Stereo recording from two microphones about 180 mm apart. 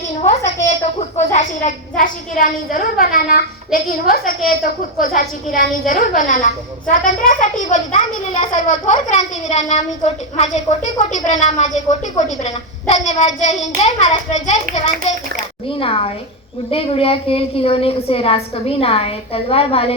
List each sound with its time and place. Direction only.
0.2 s a woman's voice: 40° left (ahead or behind)
15.8 s a woman's voice: 30° left (ahead or behind)